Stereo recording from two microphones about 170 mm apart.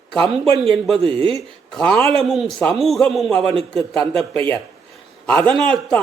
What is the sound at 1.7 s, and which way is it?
Speech, 5° left (ahead or behind).